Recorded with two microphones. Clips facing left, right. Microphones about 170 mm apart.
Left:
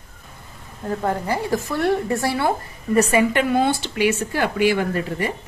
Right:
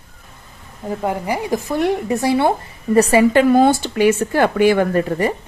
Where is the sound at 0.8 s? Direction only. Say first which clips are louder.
Right 1 dB; 10° right (ahead or behind).